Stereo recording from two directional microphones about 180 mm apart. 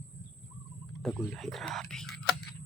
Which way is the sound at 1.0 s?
Centre (ahead or behind).